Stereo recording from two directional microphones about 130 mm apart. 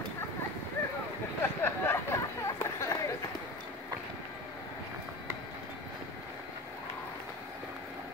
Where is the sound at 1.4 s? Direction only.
15° left (ahead or behind).